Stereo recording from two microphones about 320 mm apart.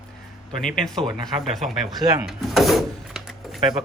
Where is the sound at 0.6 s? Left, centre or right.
Centre.